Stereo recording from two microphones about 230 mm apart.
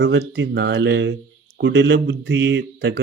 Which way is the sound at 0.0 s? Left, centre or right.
Right.